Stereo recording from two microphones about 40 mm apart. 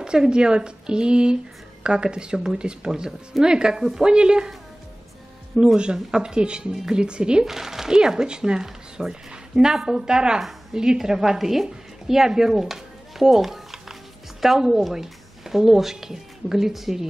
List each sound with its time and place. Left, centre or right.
0.0 s speech: right
2.9 s speech: centre
5.8 s speech: right
7.4 s a woman's voice: centre